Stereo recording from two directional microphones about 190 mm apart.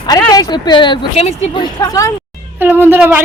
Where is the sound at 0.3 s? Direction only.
20° left (ahead or behind).